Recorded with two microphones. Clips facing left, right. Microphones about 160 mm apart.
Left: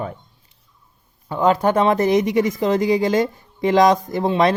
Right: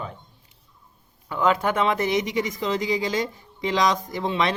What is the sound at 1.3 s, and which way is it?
Speech, 40° left (ahead or behind).